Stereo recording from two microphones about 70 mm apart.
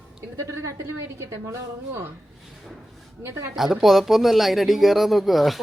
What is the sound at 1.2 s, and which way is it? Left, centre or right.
Speech, right.